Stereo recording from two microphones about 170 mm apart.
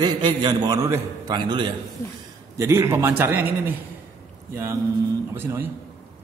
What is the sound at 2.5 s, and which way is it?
A man's voice, 15° right (ahead or behind).